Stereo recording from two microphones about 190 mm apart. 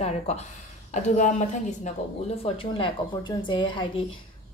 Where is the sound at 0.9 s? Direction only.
40° left (ahead or behind).